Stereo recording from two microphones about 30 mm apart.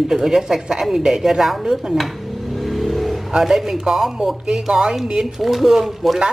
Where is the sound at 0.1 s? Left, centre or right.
Centre.